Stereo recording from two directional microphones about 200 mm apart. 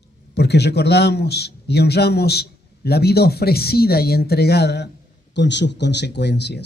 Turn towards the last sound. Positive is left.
turn(degrees=55)  # may be behind; listen again after turning